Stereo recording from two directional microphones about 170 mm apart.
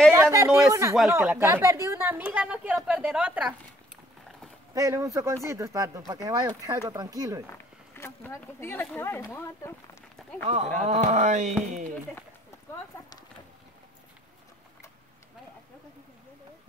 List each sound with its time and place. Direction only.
0.1 s a woman's voice: 15° right (ahead or behind)
4.7 s a man's voice: 20° right (ahead or behind)
7.5 s speech: 15° left (ahead or behind)
10.4 s speech: 40° right (ahead or behind)